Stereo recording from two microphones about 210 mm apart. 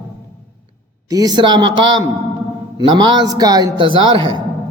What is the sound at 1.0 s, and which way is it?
A man's voice, 15° right (ahead or behind).